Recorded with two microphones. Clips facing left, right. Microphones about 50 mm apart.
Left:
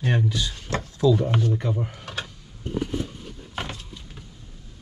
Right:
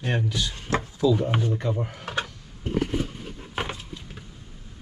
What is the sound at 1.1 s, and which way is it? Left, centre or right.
Speech, centre.